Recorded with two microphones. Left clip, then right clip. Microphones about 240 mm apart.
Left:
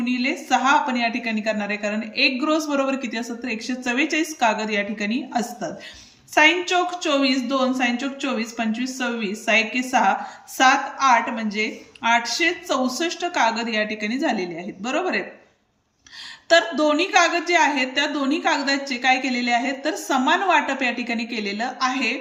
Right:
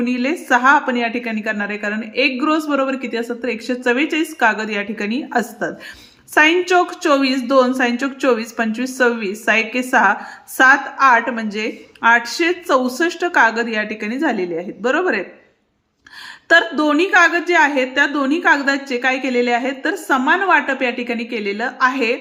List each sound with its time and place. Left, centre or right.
0.0 s a woman's voice: centre
16.5 s a woman's voice: centre